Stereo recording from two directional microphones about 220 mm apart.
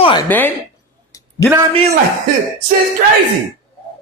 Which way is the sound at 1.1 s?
15° left (ahead or behind).